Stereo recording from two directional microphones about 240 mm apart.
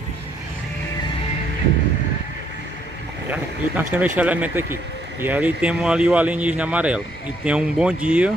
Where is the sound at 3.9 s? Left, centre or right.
Centre.